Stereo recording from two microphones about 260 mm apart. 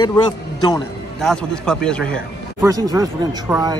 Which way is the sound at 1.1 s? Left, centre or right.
Centre.